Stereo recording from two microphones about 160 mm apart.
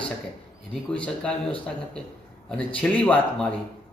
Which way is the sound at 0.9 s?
10° left (ahead or behind).